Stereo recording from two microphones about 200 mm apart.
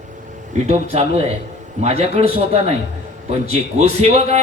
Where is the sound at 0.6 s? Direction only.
35° right (ahead or behind).